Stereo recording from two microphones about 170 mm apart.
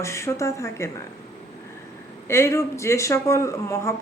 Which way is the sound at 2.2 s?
15° left (ahead or behind).